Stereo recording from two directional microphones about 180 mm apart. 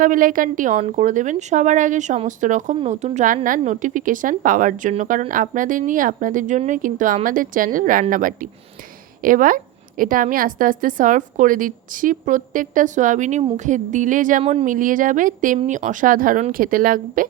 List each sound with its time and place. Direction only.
0.0 s a woman's voice: 50° right (ahead or behind)
9.2 s a woman's voice: 50° right (ahead or behind)